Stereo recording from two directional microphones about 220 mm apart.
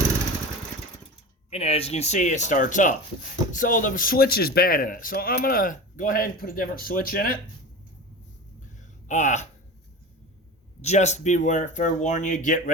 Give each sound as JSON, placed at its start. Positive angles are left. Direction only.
{"t": 1.5, "sound": "speech", "side_deg": 30}
{"t": 9.0, "sound": "speech", "side_deg": 35}
{"t": 10.8, "sound": "speech", "side_deg": 30}